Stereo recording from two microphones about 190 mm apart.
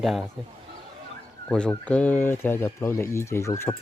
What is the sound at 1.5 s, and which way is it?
Speech, 5° left (ahead or behind).